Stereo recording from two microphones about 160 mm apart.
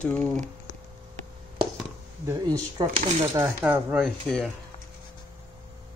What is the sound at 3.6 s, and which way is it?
Speech, 10° right (ahead or behind).